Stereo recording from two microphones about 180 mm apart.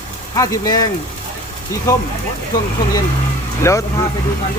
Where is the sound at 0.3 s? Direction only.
20° left (ahead or behind).